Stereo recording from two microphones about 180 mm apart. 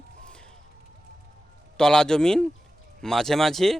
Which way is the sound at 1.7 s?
5° left (ahead or behind).